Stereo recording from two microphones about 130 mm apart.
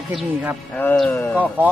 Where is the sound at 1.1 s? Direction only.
15° left (ahead or behind).